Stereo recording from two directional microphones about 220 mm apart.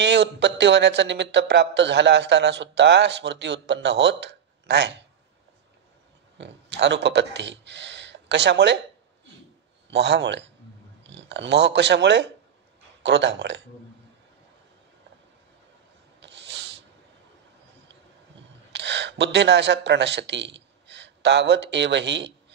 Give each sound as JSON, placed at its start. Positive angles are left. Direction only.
{"t": 0.0, "sound": "speech", "side_deg": -50}
{"t": 6.3, "sound": "speech", "side_deg": -55}
{"t": 9.8, "sound": "speech", "side_deg": -50}
{"t": 16.2, "sound": "a sound", "side_deg": -55}
{"t": 18.7, "sound": "speech", "side_deg": -55}